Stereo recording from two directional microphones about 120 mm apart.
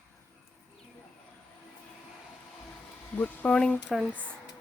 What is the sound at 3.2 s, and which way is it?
Speech, 15° left (ahead or behind).